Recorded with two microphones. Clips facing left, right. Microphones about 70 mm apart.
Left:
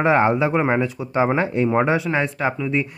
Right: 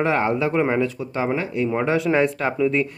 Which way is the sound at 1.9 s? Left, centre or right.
Centre.